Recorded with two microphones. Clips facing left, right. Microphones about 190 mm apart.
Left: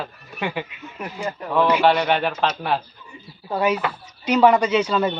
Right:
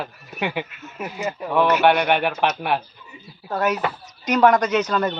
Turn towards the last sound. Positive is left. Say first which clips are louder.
# left 1 dB
turn(degrees=10)  # may be behind; listen again after turning